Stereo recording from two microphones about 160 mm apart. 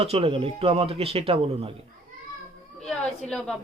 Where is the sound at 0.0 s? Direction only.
40° right (ahead or behind).